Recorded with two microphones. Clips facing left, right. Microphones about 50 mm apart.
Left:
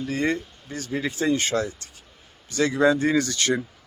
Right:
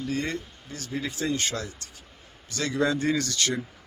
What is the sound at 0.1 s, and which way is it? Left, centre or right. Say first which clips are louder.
Speech: left 7 dB; left.